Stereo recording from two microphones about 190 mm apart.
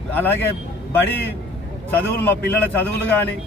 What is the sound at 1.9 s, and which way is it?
Speech, 10° left (ahead or behind).